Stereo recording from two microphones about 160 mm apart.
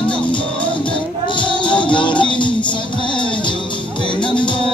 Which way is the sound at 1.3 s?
30° left (ahead or behind).